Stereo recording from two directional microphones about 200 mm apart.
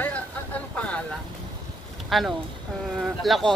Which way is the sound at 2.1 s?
Centre (ahead or behind).